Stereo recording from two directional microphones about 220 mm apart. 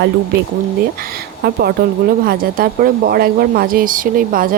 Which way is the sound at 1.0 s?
45° right (ahead or behind).